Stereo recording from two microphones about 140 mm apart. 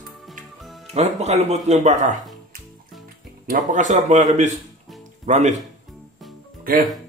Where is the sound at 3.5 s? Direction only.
65° right (ahead or behind).